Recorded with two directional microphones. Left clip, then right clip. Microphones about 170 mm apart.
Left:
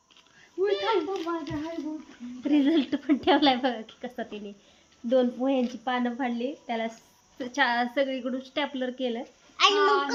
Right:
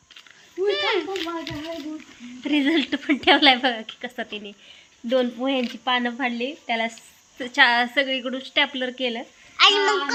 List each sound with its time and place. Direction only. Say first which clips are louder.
0.7 s a sound: right 4 dB; centre (ahead or behind)
1.1 s speech: right 2 dB; 15° left (ahead or behind)
2.4 s speech: right 3 dB; 5° right (ahead or behind)
9.6 s a child's voice: right 5 dB; centre (ahead or behind)